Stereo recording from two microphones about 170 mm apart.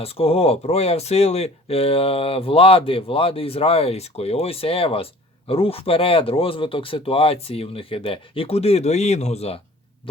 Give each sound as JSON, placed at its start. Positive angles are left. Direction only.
{"t": 0.0, "sound": "speech", "side_deg": 35}